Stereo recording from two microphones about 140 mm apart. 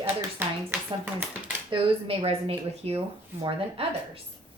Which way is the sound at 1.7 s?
40° right (ahead or behind).